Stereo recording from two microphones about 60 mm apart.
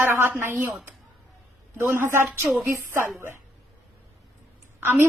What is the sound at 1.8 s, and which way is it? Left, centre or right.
A woman's voice, right.